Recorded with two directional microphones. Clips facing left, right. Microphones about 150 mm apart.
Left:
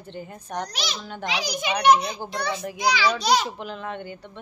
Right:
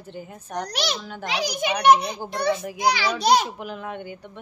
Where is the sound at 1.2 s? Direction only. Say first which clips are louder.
Right 1 dB; 55° right (ahead or behind).